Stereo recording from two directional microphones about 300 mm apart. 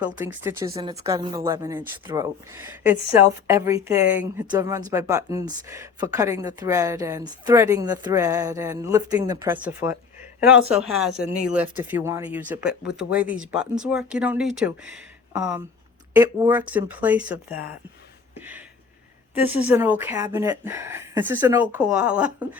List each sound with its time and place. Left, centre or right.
0.0 s a woman's voice: centre
11.2 s speech: right
11.5 s speech: centre
18.3 s a sound: centre
19.3 s a woman's voice: centre